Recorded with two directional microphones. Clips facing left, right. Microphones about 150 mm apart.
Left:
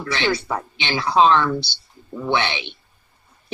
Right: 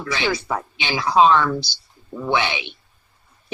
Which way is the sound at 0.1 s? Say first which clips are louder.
Left 1 dB; 10° right (ahead or behind).